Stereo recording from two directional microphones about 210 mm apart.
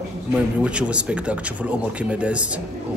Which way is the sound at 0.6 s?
5° right (ahead or behind).